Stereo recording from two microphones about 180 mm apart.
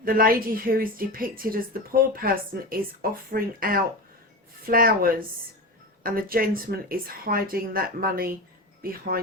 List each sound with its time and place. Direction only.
0.0 s speech: 55° right (ahead or behind)